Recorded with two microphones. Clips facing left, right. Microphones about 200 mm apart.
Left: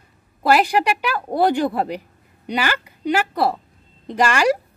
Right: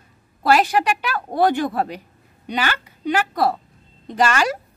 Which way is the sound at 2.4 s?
10° left (ahead or behind).